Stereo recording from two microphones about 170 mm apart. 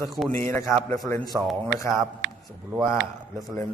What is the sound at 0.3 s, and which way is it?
Speech, 15° left (ahead or behind).